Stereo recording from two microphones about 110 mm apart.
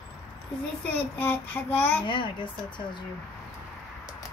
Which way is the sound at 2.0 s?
50° left (ahead or behind).